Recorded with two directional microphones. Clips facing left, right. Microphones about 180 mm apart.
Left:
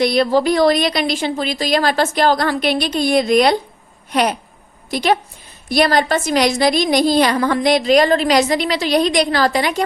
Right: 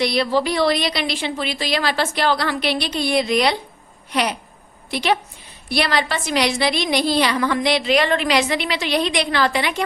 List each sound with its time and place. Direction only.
0.0 s a woman's voice: 50° left (ahead or behind)